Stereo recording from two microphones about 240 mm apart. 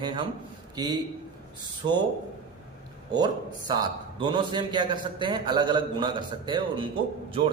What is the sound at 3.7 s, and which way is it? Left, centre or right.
A man's voice, centre.